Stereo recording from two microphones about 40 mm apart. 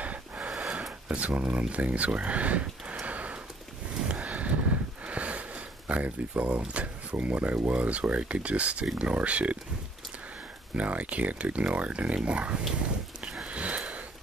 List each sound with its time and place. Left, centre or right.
0.0 s a sound: right
0.6 s a sound: right
1.0 s speech: right
3.1 s sniff: right
4.1 s a sound: right
6.7 s speech: right
10.8 s speech: right
13.2 s sniff: centre
13.5 s sniff: right